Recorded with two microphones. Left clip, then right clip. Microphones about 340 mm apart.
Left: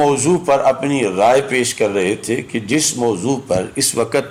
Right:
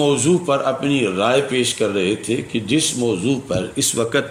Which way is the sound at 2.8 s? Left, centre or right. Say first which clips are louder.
Left 3 dB; left.